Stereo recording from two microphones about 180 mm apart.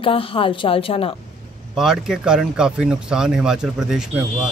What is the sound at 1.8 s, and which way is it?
Speech, 5° right (ahead or behind).